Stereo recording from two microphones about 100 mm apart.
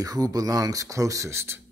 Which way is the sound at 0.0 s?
40° right (ahead or behind).